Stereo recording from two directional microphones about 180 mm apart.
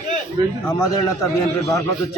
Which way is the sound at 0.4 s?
25° right (ahead or behind).